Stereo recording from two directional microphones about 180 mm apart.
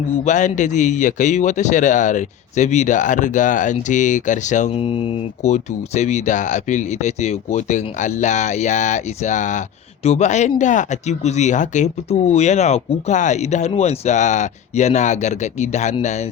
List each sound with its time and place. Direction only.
0.3 s a man's voice: 45° left (ahead or behind)